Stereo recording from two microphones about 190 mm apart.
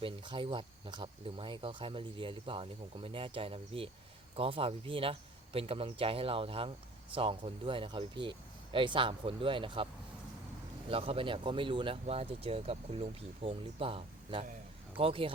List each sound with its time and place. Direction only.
0.0 s speech: 25° right (ahead or behind)